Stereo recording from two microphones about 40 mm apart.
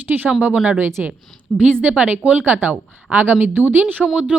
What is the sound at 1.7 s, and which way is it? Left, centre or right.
Speech, right.